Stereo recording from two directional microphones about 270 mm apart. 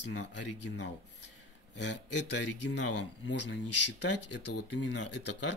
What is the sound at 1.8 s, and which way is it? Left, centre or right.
Speech, left.